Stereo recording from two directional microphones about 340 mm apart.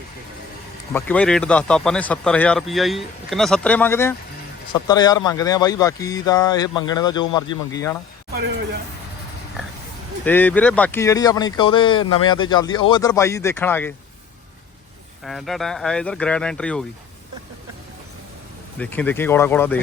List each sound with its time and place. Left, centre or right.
0.9 s speech: centre
10.2 s speech: centre
15.2 s speech: centre
18.8 s speech: centre